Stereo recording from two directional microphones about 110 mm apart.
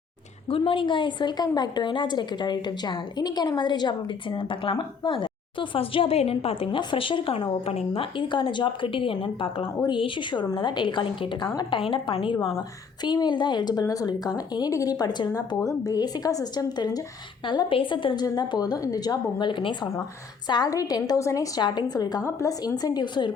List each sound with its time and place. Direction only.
0.4 s a woman's voice: 55° left (ahead or behind)
8.1 s a woman's voice: 45° left (ahead or behind)
12.5 s a woman's voice: 35° left (ahead or behind)
20.5 s a woman's voice: 35° left (ahead or behind)